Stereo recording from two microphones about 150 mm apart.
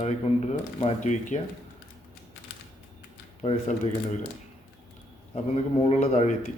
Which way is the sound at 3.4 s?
45° left (ahead or behind).